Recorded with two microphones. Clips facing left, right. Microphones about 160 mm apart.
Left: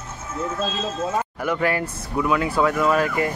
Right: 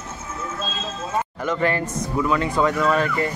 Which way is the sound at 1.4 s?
10° left (ahead or behind).